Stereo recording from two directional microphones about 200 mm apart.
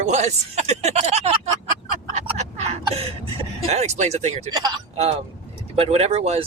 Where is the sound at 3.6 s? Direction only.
35° right (ahead or behind).